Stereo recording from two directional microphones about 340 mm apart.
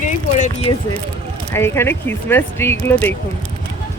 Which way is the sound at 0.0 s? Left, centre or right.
Left.